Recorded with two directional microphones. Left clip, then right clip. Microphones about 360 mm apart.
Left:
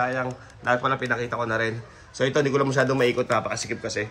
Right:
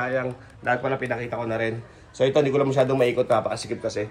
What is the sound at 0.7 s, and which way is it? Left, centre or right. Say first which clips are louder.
A man's voice: left 1 dB; left.